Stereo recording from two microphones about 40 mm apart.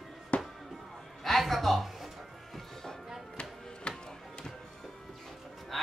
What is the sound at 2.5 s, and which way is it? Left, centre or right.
Music, centre.